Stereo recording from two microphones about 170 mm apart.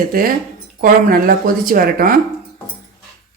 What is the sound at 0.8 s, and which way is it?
Speech, 55° right (ahead or behind).